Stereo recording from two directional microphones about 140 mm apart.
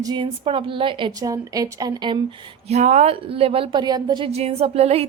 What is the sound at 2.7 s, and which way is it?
A woman's voice, 55° right (ahead or behind).